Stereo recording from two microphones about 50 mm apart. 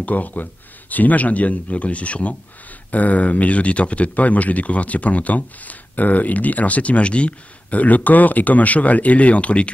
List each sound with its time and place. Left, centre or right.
0.0 s speech: left